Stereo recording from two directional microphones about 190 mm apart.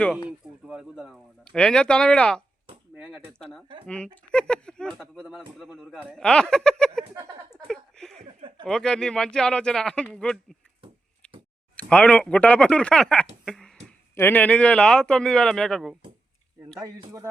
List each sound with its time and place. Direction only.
0.3 s speech: 5° right (ahead or behind)
2.9 s a sound: 10° right (ahead or behind)
3.3 s speech: 5° left (ahead or behind)
11.8 s speech: 5° left (ahead or behind)
13.4 s a sound: centre (ahead or behind)
13.8 s speech: 10° left (ahead or behind)
16.8 s speech: 15° right (ahead or behind)